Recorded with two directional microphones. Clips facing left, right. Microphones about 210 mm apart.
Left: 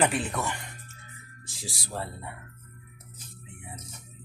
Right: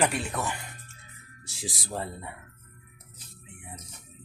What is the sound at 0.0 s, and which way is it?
Speech, 5° left (ahead or behind).